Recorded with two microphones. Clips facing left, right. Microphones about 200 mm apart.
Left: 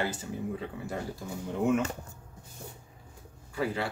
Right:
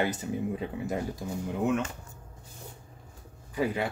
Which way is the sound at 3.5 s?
15° right (ahead or behind).